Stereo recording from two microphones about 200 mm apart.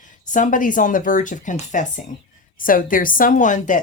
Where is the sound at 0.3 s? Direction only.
40° left (ahead or behind).